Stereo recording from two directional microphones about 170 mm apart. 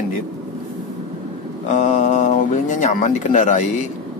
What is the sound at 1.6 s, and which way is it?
Speech, 45° left (ahead or behind).